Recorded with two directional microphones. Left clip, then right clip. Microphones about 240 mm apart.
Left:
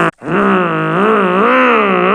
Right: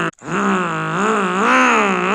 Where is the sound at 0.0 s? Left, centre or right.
Right.